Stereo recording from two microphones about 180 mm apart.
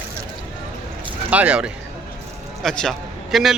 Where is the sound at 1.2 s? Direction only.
5° right (ahead or behind).